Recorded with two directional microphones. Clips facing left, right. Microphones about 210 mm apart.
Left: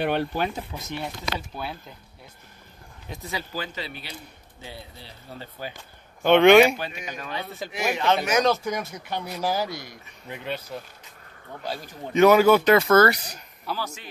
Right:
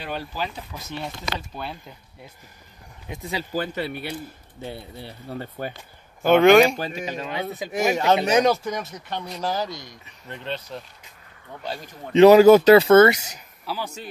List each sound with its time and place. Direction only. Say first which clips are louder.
0.0 s speech: left 6 dB; 65° left (ahead or behind)
0.7 s speech: left 1 dB; 25° left (ahead or behind)
1.5 s speech: even; 5° left (ahead or behind)
3.5 s a man's voice: right 7 dB; 55° right (ahead or behind)
6.2 s speech: right 1 dB; centre (ahead or behind)
6.8 s speech: right 5 dB; 35° right (ahead or behind)
7.2 s a man's voice: right 4 dB; 15° right (ahead or behind)
7.7 s speech: right 4 dB; 45° right (ahead or behind)
8.2 s speech: right 3 dB; 20° right (ahead or behind)
8.9 s speech: even; 5° left (ahead or behind)
12.1 s speech: right 5 dB; 30° right (ahead or behind)
13.7 s speech: even; 5° right (ahead or behind)